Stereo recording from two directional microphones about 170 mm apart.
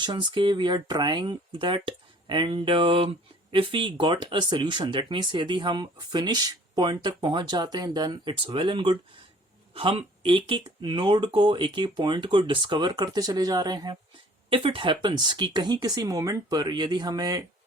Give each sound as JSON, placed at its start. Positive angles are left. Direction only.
{"t": 0.0, "sound": "speech", "side_deg": -25}